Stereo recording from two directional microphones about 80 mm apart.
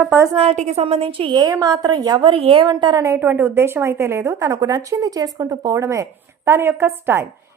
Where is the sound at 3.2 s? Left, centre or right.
Right.